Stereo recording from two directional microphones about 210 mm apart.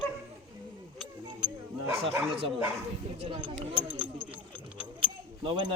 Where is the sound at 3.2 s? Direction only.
25° right (ahead or behind).